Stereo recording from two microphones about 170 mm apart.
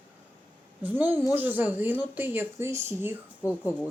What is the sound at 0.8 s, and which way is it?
Speech, 10° right (ahead or behind).